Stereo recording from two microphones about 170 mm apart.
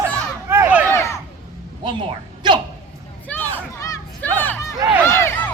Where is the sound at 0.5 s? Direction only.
10° right (ahead or behind).